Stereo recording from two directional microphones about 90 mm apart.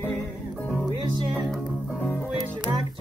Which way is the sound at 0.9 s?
55° right (ahead or behind).